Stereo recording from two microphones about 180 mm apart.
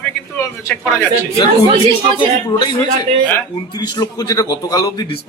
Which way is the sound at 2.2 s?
25° left (ahead or behind).